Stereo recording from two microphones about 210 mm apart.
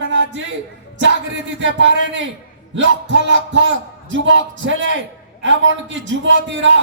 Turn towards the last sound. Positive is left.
turn(degrees=-60)  # may be behind; listen again after turning